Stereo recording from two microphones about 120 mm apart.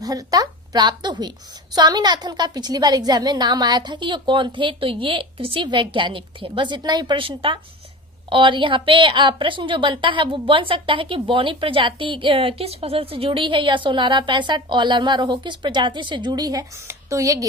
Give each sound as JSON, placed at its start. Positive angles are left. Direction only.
{"t": 0.0, "sound": "a woman's voice", "side_deg": -30}